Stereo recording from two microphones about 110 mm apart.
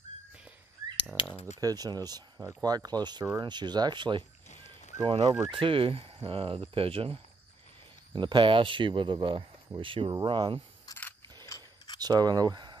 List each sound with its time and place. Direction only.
1.2 s speech: 50° left (ahead or behind)
1.6 s speech: 35° right (ahead or behind); by 7.2 s 55° right (ahead or behind)
8.1 s speech: 45° right (ahead or behind)
12.0 s speech: 40° right (ahead or behind)